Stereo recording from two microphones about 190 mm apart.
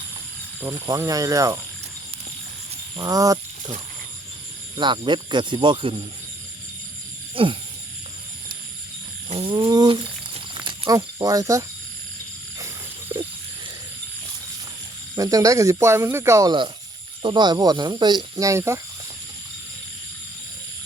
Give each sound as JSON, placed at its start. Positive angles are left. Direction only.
{"t": 0.6, "sound": "speech", "side_deg": -15}
{"t": 3.0, "sound": "speech", "side_deg": -20}
{"t": 4.8, "sound": "speech", "side_deg": -25}
{"t": 7.4, "sound": "speech", "side_deg": -30}
{"t": 9.3, "sound": "a sound", "side_deg": -30}
{"t": 15.1, "sound": "speech", "side_deg": -20}